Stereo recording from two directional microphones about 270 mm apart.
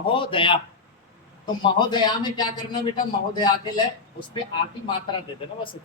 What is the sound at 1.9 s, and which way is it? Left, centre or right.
Speech, centre.